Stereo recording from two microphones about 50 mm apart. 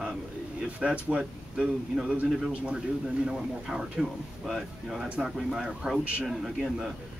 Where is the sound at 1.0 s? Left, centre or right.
Right.